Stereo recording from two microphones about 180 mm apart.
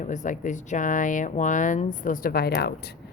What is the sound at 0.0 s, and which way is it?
A woman's voice, 45° left (ahead or behind).